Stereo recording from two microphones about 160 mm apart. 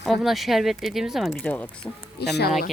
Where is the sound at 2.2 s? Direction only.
90° left.